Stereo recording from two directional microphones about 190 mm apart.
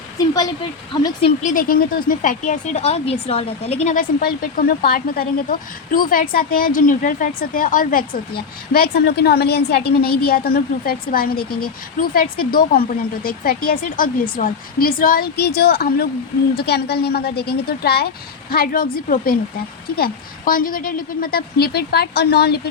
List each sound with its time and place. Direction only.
0.9 s speech: 25° left (ahead or behind)
1.4 s a woman's voice: 45° left (ahead or behind)